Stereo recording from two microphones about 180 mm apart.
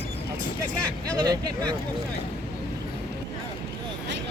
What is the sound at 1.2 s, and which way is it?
Speech, 25° right (ahead or behind).